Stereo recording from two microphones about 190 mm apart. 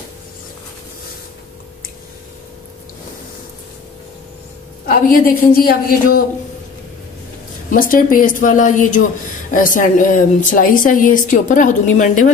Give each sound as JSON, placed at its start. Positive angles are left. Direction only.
{"t": 4.8, "sound": "speech", "side_deg": 50}
{"t": 7.7, "sound": "speech", "side_deg": 45}